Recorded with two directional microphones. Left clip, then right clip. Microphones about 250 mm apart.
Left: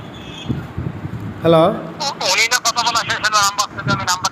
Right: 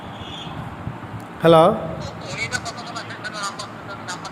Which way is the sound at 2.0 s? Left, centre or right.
Left.